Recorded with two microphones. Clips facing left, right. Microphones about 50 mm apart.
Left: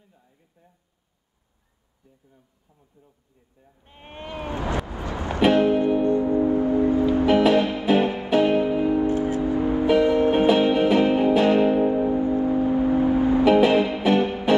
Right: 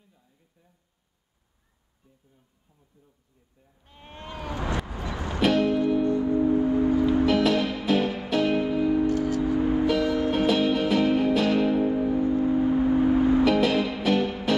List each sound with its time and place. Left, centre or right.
3.8 s music: left